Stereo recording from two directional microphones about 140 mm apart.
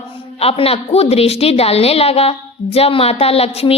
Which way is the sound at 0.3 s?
45° left (ahead or behind).